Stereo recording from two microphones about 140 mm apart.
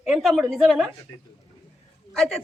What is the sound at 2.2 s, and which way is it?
Speech, 5° left (ahead or behind).